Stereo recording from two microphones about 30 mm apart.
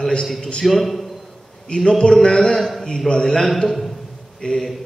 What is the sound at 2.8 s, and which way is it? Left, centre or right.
A man's voice, left.